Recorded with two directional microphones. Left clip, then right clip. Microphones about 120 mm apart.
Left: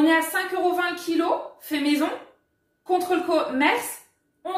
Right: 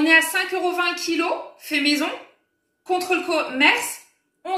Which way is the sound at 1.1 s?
35° left (ahead or behind).